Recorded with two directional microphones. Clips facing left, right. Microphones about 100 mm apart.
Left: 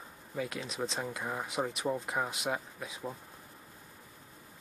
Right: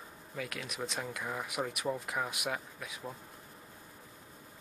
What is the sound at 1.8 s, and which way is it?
Speech, 10° left (ahead or behind).